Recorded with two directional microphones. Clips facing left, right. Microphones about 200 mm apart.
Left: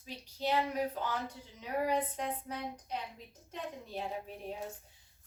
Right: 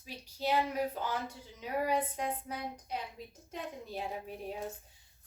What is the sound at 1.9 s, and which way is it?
Speech, 10° right (ahead or behind).